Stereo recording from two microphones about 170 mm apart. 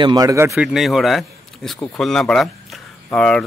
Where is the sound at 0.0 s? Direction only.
20° right (ahead or behind).